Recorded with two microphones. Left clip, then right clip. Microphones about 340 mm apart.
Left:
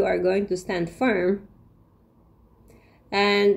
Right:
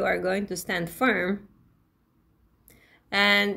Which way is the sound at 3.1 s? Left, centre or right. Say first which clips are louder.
Left 2 dB; right.